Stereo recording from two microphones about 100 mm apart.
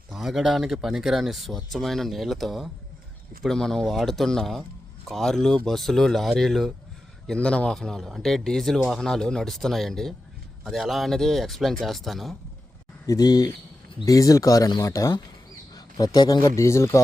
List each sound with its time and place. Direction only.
0.1 s speech: 5° right (ahead or behind)
13.1 s a man's voice: 40° left (ahead or behind)
16.6 s a man's voice: 30° left (ahead or behind)